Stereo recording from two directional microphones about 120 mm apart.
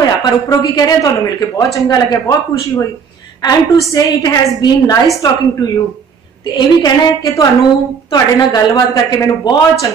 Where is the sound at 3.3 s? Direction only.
30° left (ahead or behind).